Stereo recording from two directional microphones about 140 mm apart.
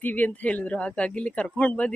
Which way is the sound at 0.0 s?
10° left (ahead or behind).